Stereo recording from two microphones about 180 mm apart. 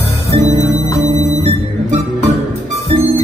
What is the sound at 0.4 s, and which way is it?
Music, 40° right (ahead or behind).